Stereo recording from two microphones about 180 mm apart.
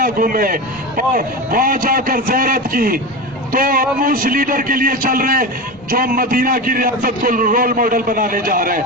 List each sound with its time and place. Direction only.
0.0 s a man's voice: 50° right (ahead or behind)